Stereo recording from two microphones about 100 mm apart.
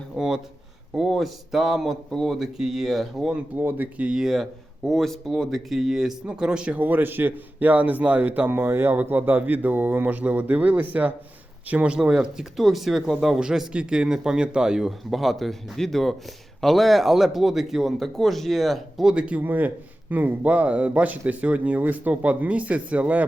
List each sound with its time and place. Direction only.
0.2 s speech: 5° right (ahead or behind)
3.6 s a man's voice: 20° right (ahead or behind)